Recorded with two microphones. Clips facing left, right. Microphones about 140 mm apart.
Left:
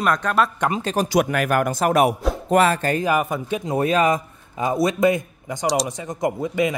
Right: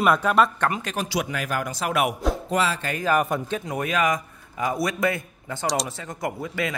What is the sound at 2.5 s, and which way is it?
Speech, 55° left (ahead or behind).